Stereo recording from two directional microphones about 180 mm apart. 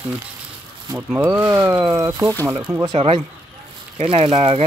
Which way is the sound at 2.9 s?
35° right (ahead or behind).